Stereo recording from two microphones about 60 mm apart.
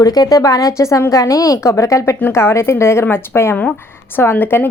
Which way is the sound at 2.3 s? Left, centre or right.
Left.